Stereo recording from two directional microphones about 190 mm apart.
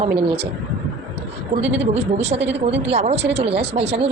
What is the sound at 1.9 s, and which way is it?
A woman's voice, 35° right (ahead or behind).